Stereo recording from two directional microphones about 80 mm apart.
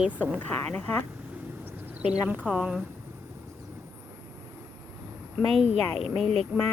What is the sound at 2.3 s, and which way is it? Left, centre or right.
Speech, centre.